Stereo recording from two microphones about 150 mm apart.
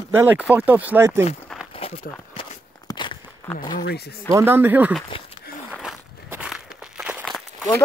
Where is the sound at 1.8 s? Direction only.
40° left (ahead or behind).